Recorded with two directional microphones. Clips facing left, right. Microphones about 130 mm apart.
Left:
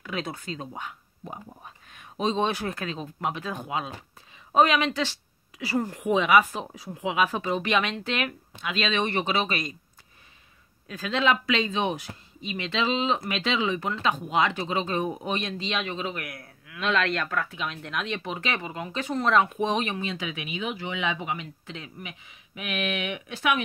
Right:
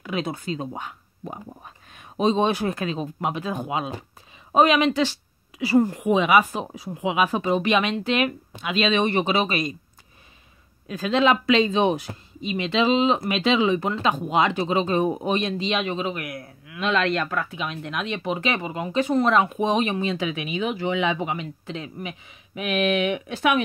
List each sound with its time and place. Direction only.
0.0 s a man's voice: 15° right (ahead or behind)
2.1 s a man's voice: 15° right (ahead or behind)
10.9 s speech: 20° right (ahead or behind)
12.4 s a man's voice: 15° right (ahead or behind)
20.0 s speech: 30° right (ahead or behind)